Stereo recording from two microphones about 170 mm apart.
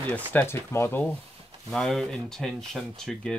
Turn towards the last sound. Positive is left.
turn(degrees=0)  # may be behind; listen again after turning